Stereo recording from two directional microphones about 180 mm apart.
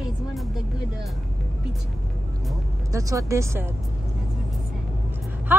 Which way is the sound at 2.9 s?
20° right (ahead or behind).